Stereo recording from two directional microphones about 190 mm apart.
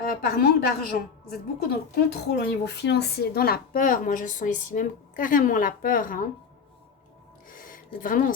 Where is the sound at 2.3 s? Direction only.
55° left (ahead or behind).